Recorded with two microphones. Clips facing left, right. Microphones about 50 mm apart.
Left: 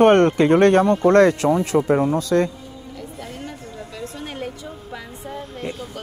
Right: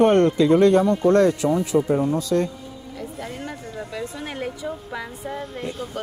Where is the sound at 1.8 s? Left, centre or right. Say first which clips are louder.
Left 2 dB; left.